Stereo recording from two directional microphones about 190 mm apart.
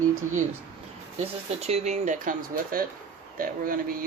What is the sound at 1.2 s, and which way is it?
Speech, 35° right (ahead or behind).